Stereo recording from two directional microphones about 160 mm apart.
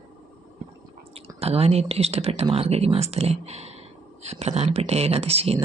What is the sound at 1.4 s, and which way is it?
Speech, 40° right (ahead or behind).